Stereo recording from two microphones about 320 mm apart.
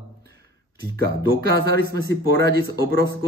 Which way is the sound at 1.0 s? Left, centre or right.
Right.